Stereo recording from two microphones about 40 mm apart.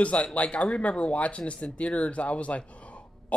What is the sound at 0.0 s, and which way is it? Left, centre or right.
Speech, left.